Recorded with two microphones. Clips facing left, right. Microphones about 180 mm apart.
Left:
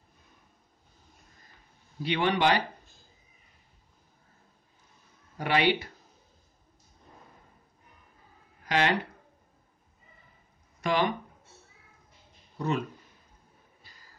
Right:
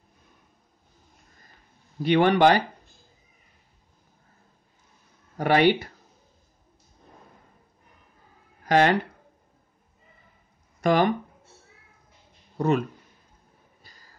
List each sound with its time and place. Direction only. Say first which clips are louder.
2.0 s speech: right 7 dB; 50° right (ahead or behind)
5.4 s speech: right 6 dB; 45° right (ahead or behind)
8.6 s speech: right 7 dB; 45° right (ahead or behind)
10.8 s speech: right 6 dB; 45° right (ahead or behind)
12.5 s speech: right 7 dB; 50° right (ahead or behind)